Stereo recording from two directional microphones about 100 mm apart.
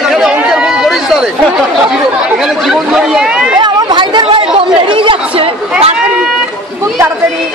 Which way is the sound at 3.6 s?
45° right (ahead or behind).